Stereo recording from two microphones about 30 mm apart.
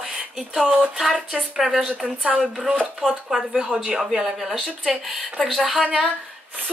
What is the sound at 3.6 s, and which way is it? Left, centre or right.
Speech, right.